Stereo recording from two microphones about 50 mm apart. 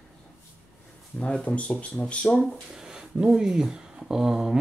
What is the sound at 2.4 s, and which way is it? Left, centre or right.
Speech, centre.